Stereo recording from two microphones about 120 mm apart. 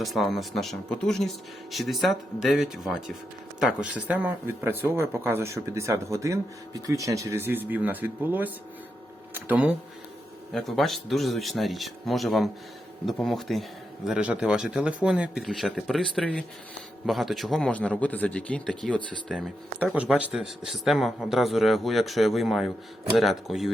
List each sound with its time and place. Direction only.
0.0 s speech: centre (ahead or behind); by 7.3 s 25° right (ahead or behind)
7.4 s speech: 15° right (ahead or behind)
10.5 s speech: centre (ahead or behind)
19.3 s speech: 10° right (ahead or behind)